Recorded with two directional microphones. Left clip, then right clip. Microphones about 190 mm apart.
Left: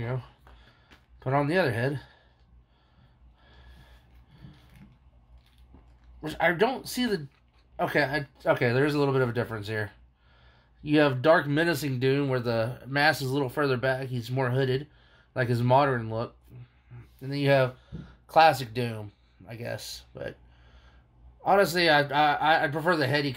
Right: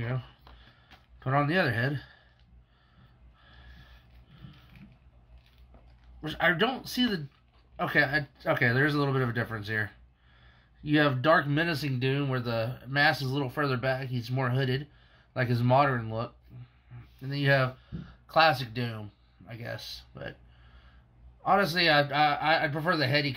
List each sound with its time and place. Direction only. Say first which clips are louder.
0.0 s speech: left 2 dB; 20° left (ahead or behind)
6.2 s speech: left 2 dB; 25° left (ahead or behind); by 20.3 s 40° left (ahead or behind)
21.4 s speech: left 2 dB; 40° left (ahead or behind)